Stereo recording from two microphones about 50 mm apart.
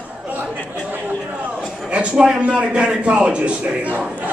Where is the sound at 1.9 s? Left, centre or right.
Right.